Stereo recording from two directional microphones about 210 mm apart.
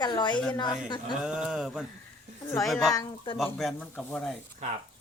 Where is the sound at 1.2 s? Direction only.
5° right (ahead or behind).